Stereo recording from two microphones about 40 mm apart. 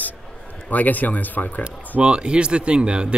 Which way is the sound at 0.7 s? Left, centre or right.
Left.